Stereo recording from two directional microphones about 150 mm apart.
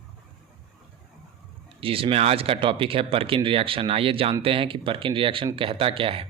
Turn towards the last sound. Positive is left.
turn(degrees=-40)  # may be behind; listen again after turning